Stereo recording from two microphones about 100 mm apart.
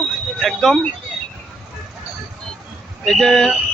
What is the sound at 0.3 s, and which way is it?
Speech, 5° left (ahead or behind).